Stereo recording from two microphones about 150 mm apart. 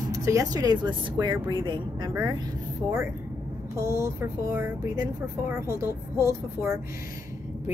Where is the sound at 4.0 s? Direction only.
20° right (ahead or behind).